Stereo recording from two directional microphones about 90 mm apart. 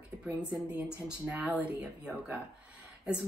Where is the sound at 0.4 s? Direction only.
15° right (ahead or behind).